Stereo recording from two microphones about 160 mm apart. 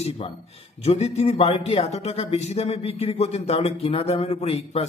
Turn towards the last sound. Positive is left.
turn(degrees=40)  # may be behind; listen again after turning